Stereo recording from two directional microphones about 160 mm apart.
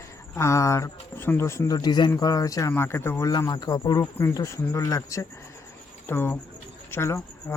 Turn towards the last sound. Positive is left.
turn(degrees=15)  # may be behind; listen again after turning